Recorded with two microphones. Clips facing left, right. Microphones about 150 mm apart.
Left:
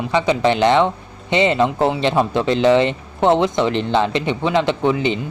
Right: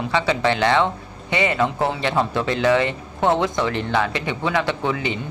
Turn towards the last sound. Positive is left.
turn(degrees=20)  # may be behind; listen again after turning